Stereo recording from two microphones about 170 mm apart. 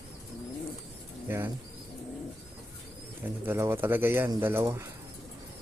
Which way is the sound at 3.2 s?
10° right (ahead or behind).